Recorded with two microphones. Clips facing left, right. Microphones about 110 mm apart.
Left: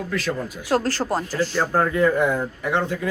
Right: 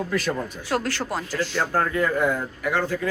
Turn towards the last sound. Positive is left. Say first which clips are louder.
# left 1 dB
turn(degrees=20)  # may be behind; listen again after turning